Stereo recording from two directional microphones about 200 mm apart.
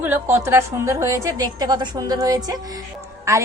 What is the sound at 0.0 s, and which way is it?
A woman's voice, 10° right (ahead or behind).